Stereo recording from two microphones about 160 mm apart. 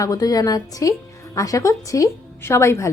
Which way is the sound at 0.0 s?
20° left (ahead or behind).